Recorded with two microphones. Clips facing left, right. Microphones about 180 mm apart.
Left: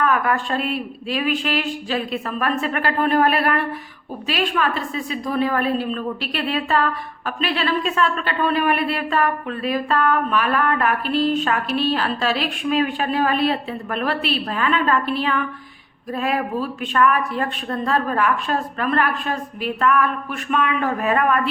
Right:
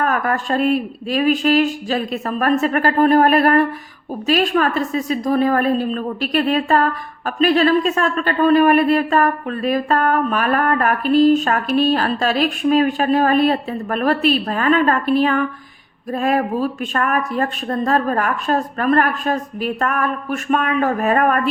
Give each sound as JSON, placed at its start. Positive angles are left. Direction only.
{"t": 0.0, "sound": "a woman's voice", "side_deg": -45}